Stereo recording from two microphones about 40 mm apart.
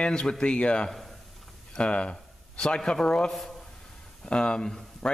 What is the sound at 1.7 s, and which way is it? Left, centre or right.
A man's voice, left.